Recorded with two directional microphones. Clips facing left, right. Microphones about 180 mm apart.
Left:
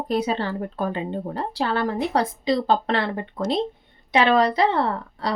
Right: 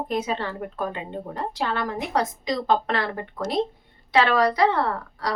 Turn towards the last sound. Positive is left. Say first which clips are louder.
# left 2 dB
turn(degrees=25)  # may be behind; listen again after turning